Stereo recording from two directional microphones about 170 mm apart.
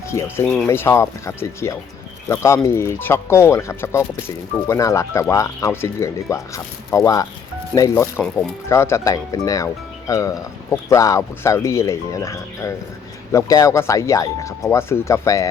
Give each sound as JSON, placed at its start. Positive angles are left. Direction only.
{"t": 0.1, "sound": "speech", "side_deg": 15}
{"t": 0.4, "sound": "speech", "side_deg": 5}
{"t": 0.7, "sound": "speech", "side_deg": 15}